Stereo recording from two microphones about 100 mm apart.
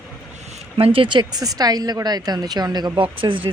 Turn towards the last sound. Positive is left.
turn(degrees=-55)  # may be behind; listen again after turning